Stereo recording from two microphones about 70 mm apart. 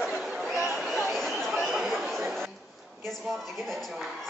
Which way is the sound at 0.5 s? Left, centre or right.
Centre.